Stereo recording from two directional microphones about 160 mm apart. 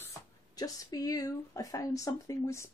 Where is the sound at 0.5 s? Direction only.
20° left (ahead or behind).